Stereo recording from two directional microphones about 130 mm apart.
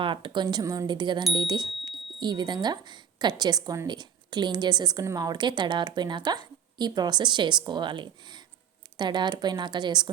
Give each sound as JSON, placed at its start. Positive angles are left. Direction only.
{"t": 0.0, "sound": "a woman's voice", "side_deg": -40}